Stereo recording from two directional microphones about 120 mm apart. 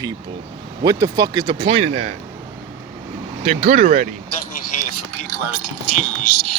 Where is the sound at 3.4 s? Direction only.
60° right (ahead or behind).